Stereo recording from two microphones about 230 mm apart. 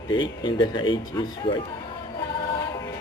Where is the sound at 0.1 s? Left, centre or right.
Centre.